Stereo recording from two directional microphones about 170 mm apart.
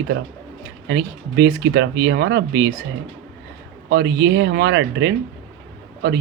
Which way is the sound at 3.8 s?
70° right (ahead or behind).